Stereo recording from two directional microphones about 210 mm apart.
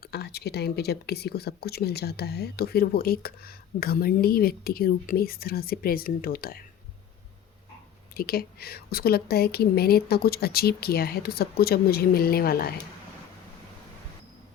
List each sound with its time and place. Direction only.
0.0 s speech: 50° left (ahead or behind)
8.1 s speech: 45° left (ahead or behind)